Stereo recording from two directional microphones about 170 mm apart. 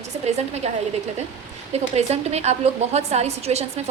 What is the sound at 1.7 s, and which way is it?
A woman's voice, 40° right (ahead or behind).